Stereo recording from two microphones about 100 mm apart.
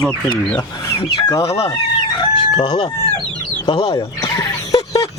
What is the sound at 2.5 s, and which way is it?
Speech, 50° left (ahead or behind).